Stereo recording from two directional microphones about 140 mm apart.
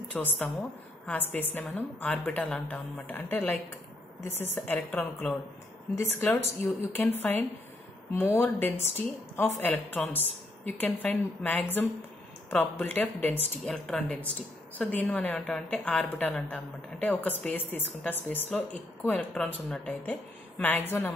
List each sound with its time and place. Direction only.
0.1 s a woman's voice: 10° left (ahead or behind)
4.6 s a woman's voice: 15° left (ahead or behind)
13.6 s a woman's voice: centre (ahead or behind)